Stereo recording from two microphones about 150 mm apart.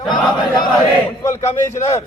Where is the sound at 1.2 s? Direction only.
20° left (ahead or behind).